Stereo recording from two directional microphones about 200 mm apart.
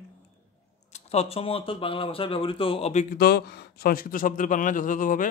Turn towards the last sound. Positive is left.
turn(degrees=40)  # may be behind; listen again after turning